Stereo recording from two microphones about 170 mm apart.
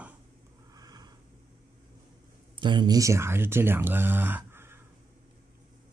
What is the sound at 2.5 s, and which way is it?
Speech, 25° right (ahead or behind).